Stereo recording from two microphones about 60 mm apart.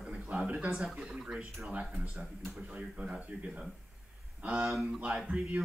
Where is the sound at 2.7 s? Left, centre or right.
Centre.